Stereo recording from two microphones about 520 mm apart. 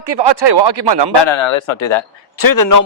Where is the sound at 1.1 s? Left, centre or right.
Left.